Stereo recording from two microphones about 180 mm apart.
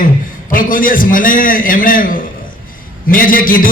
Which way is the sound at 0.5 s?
50° left (ahead or behind).